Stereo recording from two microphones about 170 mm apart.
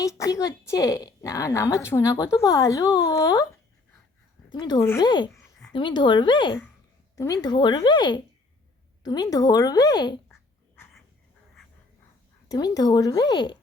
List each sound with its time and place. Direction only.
0.0 s a woman's voice: 20° left (ahead or behind)
4.4 s a woman's voice: 25° left (ahead or behind)
12.5 s a woman's voice: 25° left (ahead or behind)